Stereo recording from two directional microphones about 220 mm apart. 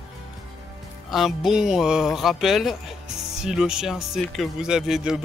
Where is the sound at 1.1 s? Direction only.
Centre (ahead or behind).